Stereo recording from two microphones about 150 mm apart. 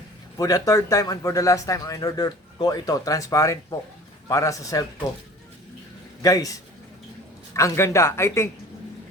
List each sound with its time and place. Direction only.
0.3 s a man's voice: 25° left (ahead or behind)
6.2 s a man's voice: 25° left (ahead or behind)